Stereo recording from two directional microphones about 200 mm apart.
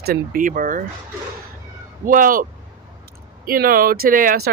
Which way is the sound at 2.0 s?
45° right (ahead or behind).